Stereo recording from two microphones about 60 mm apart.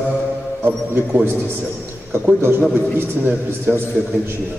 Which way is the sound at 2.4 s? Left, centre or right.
Right.